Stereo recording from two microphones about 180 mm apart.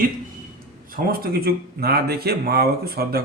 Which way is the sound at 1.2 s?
60° right (ahead or behind).